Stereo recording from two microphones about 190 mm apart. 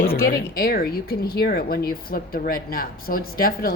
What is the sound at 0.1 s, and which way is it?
Speech, 55° left (ahead or behind).